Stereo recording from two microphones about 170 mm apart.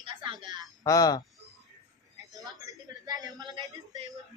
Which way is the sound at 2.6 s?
20° right (ahead or behind).